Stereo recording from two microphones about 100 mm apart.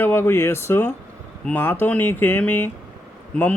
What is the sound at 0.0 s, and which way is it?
Speech, 20° left (ahead or behind).